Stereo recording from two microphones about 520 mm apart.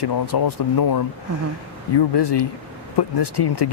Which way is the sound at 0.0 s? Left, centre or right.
Left.